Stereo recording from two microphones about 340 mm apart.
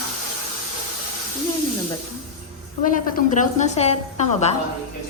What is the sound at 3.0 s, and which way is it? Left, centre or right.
A woman's voice, left.